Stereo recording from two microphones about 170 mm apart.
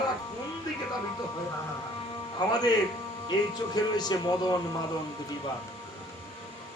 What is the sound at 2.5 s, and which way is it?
Speech, 25° left (ahead or behind).